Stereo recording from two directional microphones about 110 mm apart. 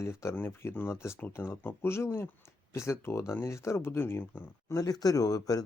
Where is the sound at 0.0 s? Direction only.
25° left (ahead or behind).